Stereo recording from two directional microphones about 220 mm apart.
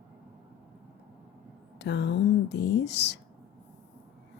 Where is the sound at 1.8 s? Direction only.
50° left (ahead or behind).